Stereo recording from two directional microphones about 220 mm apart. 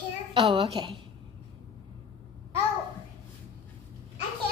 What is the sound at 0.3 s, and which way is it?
Speech, 25° right (ahead or behind).